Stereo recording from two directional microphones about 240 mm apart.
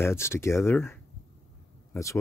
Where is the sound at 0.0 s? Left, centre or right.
Centre.